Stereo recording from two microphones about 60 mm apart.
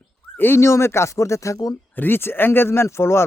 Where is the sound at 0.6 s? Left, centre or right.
Left.